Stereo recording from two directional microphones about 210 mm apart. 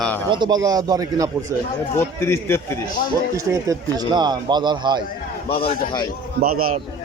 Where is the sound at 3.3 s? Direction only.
15° right (ahead or behind).